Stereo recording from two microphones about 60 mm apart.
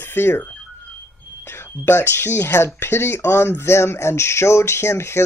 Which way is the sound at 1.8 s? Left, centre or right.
Left.